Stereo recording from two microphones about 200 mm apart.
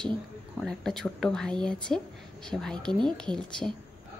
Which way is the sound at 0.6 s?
Centre (ahead or behind).